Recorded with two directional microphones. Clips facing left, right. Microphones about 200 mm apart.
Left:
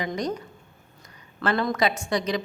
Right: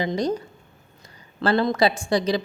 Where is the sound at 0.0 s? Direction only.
30° right (ahead or behind).